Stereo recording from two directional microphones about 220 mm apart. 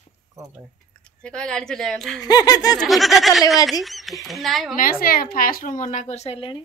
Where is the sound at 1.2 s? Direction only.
5° left (ahead or behind).